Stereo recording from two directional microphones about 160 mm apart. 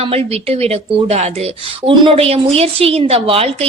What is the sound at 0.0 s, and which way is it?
A woman's voice, 40° right (ahead or behind).